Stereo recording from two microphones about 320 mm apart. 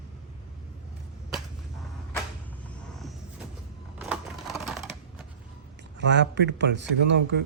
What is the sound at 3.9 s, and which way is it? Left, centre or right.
Typewriter, centre.